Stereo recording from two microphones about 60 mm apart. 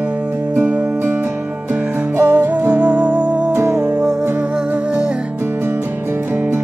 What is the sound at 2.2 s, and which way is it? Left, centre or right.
Music, right.